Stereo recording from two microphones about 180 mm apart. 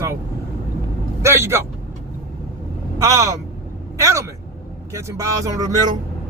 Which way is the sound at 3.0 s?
15° right (ahead or behind).